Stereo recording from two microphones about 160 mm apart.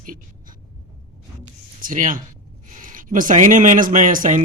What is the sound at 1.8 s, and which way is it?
Speech, 55° right (ahead or behind).